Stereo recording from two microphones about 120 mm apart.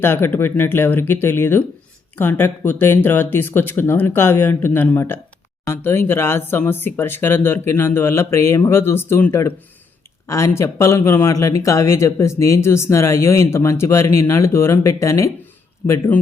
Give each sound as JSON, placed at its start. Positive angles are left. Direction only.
{"t": 0.0, "sound": "speech", "side_deg": 20}
{"t": 15.9, "sound": "speech", "side_deg": 15}